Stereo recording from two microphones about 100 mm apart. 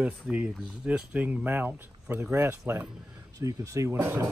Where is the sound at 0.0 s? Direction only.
15° right (ahead or behind).